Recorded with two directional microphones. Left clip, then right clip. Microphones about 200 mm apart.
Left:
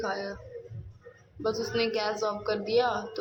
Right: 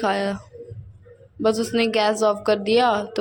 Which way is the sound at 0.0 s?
40° right (ahead or behind).